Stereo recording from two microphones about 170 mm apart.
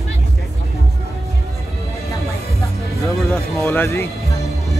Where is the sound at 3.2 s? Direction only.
Centre (ahead or behind).